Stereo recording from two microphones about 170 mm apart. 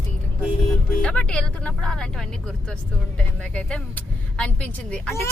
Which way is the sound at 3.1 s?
5° left (ahead or behind).